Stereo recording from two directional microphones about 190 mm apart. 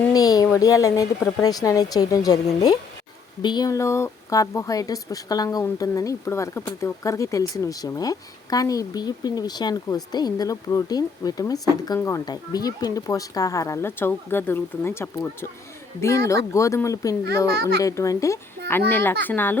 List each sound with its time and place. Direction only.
0.1 s a sound: 20° left (ahead or behind)
0.6 s a woman's voice: 15° left (ahead or behind)
3.4 s a woman's voice: 20° left (ahead or behind)
17.5 s a child's voice: 55° right (ahead or behind)
17.8 s speech: 15° left (ahead or behind)